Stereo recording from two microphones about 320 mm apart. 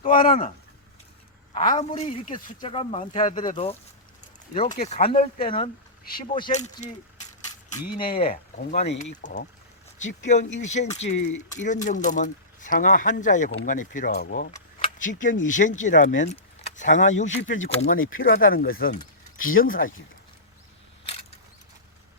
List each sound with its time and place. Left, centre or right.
0.0 s speech: left
1.5 s speech: centre
4.8 s speech: left
7.9 s speech: centre
17.2 s speech: left
17.5 s speech: left
17.7 s speech: left